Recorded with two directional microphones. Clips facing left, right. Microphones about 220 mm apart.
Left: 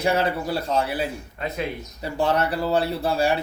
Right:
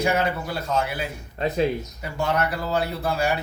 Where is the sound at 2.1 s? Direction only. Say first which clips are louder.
Left 2 dB; 30° left (ahead or behind).